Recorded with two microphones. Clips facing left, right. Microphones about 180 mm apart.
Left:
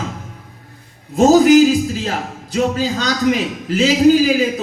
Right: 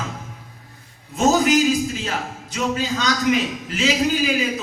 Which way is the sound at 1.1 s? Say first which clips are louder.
Left 8 dB; 35° left (ahead or behind).